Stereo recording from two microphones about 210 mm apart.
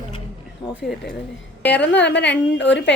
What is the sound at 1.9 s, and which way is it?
Speech, 55° left (ahead or behind).